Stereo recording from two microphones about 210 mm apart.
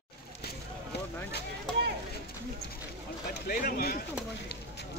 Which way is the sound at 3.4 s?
45° left (ahead or behind).